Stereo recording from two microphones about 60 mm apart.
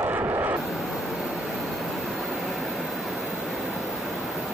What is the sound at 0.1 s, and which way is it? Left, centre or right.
Artillery fire, right.